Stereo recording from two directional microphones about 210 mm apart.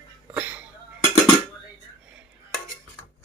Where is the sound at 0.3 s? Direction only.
10° right (ahead or behind).